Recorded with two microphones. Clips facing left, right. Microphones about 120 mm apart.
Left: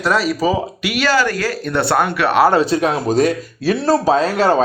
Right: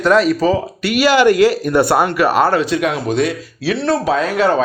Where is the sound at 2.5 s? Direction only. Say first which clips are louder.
Left 1 dB; 35° left (ahead or behind).